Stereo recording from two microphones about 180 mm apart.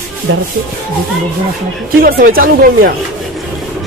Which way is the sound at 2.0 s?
55° right (ahead or behind).